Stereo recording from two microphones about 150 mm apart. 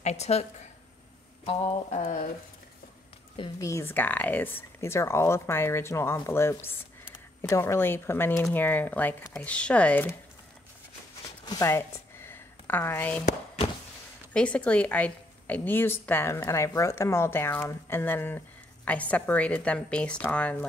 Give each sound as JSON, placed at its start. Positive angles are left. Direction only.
{"t": 0.0, "sound": "speech", "side_deg": 45}
{"t": 3.3, "sound": "a woman's voice", "side_deg": 30}
{"t": 3.6, "sound": "a woman's voice", "side_deg": 15}
{"t": 11.4, "sound": "speech", "side_deg": 25}
{"t": 11.7, "sound": "a sound", "side_deg": 15}
{"t": 14.3, "sound": "a woman's voice", "side_deg": 10}